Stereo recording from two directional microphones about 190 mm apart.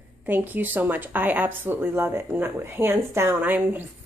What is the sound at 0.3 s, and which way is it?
Speech, 10° right (ahead or behind).